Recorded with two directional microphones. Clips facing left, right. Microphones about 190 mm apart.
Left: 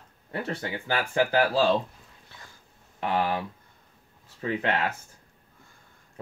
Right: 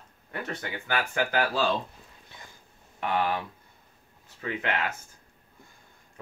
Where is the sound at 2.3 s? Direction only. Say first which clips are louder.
Right 1 dB; 15° right (ahead or behind).